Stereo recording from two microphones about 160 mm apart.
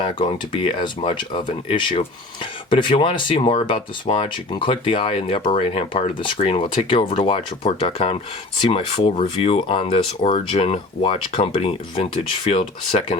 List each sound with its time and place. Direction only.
0.0 s speech: 30° left (ahead or behind)